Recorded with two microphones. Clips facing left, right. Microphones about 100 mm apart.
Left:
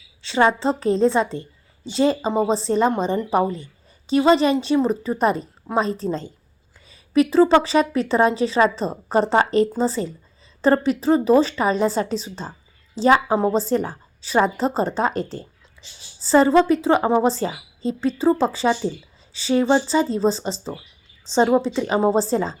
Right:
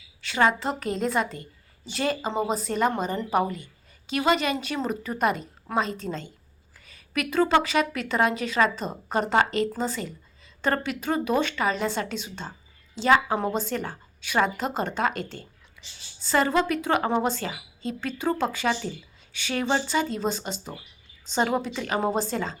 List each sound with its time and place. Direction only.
0.2 s a woman's voice: 25° left (ahead or behind)
17.2 s a woman's voice: 30° left (ahead or behind)